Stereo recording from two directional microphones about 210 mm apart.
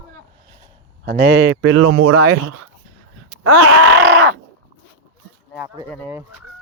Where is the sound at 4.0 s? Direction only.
55° right (ahead or behind).